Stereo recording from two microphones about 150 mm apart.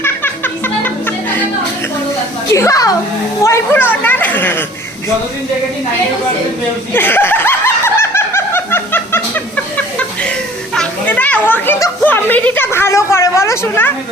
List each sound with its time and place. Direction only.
0.0 s music: 15° left (ahead or behind)
2.5 s speech: 20° left (ahead or behind)
6.9 s snicker: 15° left (ahead or behind)
10.8 s a child's voice: 10° left (ahead or behind)